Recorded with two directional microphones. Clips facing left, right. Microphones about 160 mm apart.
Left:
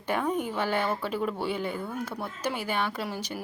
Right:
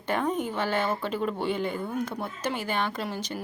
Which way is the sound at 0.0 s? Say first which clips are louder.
Right 1 dB; 10° left (ahead or behind).